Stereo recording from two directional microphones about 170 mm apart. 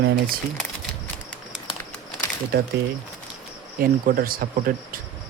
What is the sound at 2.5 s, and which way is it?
Speech, 60° right (ahead or behind).